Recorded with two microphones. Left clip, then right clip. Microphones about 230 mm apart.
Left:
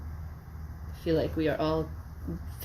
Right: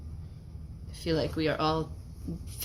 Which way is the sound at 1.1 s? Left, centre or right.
Right.